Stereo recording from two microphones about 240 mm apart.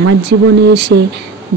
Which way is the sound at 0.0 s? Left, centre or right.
Right.